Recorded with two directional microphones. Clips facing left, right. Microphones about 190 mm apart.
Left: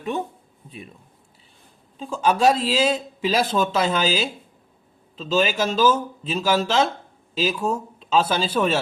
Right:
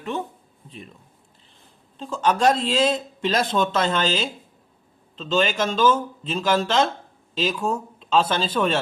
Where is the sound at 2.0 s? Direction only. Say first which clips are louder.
Left 1 dB; 5° left (ahead or behind).